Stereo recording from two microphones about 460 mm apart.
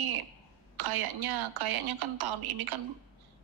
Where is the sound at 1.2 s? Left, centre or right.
Right.